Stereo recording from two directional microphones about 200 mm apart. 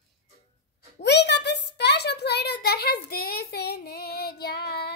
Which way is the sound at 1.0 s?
60° left (ahead or behind).